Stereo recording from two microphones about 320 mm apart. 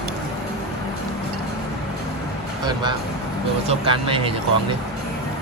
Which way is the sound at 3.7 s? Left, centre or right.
Centre.